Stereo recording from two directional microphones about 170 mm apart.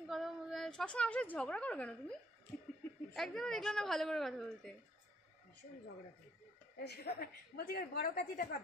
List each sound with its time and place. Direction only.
0.1 s a woman's voice: centre (ahead or behind)
6.8 s a woman's voice: 70° left (ahead or behind); by 8.5 s 55° left (ahead or behind)